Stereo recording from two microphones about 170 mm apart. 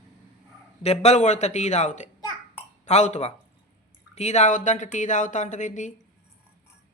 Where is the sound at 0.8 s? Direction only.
40° left (ahead or behind).